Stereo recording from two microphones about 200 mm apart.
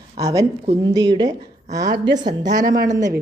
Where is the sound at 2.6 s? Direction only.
45° right (ahead or behind).